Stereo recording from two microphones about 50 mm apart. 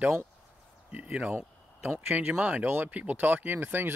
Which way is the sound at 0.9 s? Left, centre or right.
Centre.